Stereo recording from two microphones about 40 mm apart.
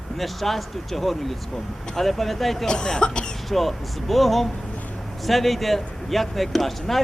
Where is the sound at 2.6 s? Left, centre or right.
Left.